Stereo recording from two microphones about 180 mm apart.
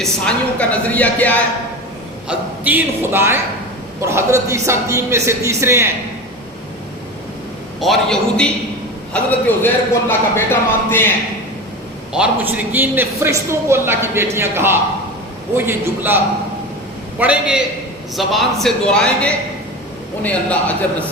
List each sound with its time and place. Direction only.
0.0 s speech: 5° left (ahead or behind)
2.2 s a man's voice: 10° right (ahead or behind)
7.8 s a man's voice: centre (ahead or behind)
12.1 s a man's voice: 10° right (ahead or behind)